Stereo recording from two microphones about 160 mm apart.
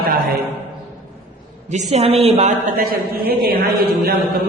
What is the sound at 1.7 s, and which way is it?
Speech, 45° right (ahead or behind).